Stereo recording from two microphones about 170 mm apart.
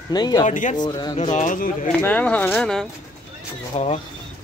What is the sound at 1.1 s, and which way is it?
Speech, 45° left (ahead or behind).